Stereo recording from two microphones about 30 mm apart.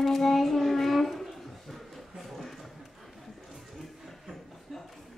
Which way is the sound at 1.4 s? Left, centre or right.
Centre.